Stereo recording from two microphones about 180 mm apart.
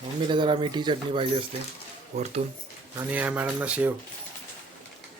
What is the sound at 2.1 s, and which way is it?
Speech, 40° right (ahead or behind).